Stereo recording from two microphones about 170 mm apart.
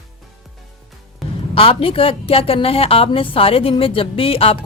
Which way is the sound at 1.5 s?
30° left (ahead or behind).